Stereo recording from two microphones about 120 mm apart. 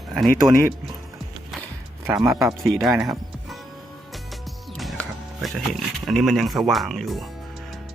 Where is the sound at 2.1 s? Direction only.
5° right (ahead or behind).